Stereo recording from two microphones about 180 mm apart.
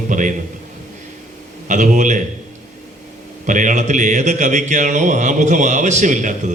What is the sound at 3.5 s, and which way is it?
Speech, 45° right (ahead or behind).